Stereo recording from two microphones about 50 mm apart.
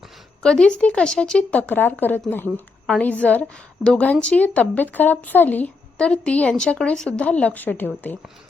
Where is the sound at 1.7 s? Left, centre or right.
Left.